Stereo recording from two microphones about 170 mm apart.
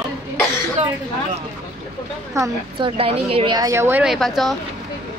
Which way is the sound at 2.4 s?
20° right (ahead or behind).